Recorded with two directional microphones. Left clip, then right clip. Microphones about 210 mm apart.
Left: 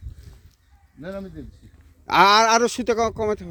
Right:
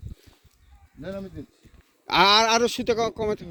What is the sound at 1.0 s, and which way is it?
Speech, 15° right (ahead or behind).